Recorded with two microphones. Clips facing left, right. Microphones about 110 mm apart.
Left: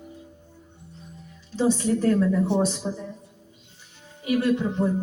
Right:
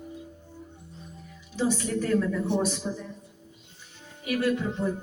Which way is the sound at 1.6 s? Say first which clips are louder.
Left 5 dB; 30° left (ahead or behind).